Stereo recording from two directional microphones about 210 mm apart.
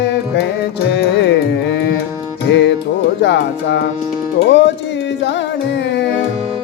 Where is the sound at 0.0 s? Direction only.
50° left (ahead or behind).